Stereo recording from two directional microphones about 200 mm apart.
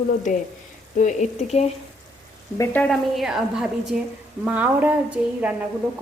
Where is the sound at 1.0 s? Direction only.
35° left (ahead or behind).